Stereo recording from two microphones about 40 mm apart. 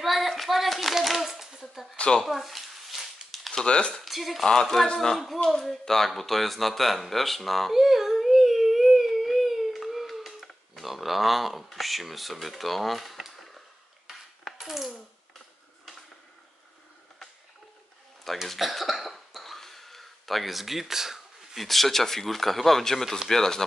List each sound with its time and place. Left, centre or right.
0.0 s clapping: centre
0.4 s speech: centre
2.2 s a sound: centre
3.6 s speech: left
4.0 s speech: centre
4.8 s speech: centre
5.1 s speech: centre
14.4 s coin: centre
18.3 s speech: centre
18.6 s cough: centre
21.6 s speech: centre